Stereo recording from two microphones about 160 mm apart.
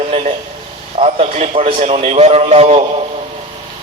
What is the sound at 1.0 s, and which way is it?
A man's voice, 45° right (ahead or behind).